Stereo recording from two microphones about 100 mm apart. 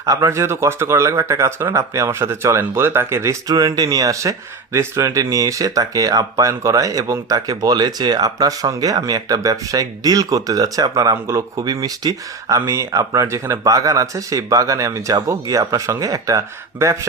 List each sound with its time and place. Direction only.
0.0 s speech: 30° right (ahead or behind)
3.5 s speech: 35° right (ahead or behind)
12.5 s speech: 25° right (ahead or behind)